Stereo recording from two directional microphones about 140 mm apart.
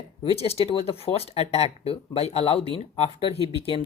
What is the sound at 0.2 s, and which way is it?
Speech, 45° left (ahead or behind).